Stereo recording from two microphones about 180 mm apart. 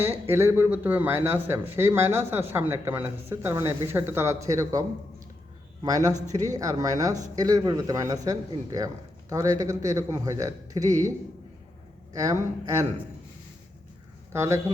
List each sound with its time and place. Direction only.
0.0 s a man's voice: 10° right (ahead or behind)
12.1 s a man's voice: 20° right (ahead or behind)
14.3 s speech: 15° right (ahead or behind)